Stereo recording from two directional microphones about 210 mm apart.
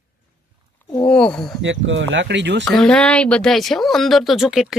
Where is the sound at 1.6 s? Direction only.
60° right (ahead or behind).